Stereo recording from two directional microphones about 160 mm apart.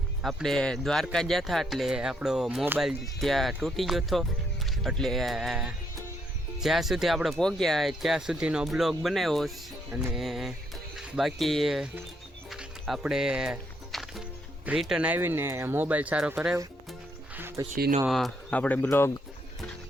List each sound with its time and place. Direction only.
0.2 s speech: centre (ahead or behind)
10.1 s a sound: centre (ahead or behind)
10.9 s speech: centre (ahead or behind)
12.5 s music: 5° right (ahead or behind)
14.7 s speech: 5° right (ahead or behind)
17.6 s speech: 20° right (ahead or behind)
18.1 s speech: 5° left (ahead or behind)